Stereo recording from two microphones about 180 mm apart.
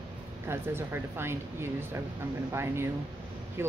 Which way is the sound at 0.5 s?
15° right (ahead or behind).